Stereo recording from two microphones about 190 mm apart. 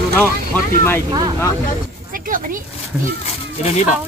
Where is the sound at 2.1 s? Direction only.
45° right (ahead or behind).